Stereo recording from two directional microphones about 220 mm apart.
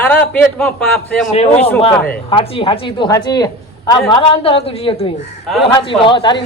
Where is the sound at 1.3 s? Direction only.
30° left (ahead or behind).